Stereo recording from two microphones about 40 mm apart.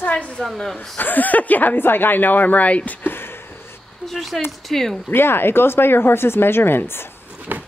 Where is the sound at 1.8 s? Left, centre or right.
Left.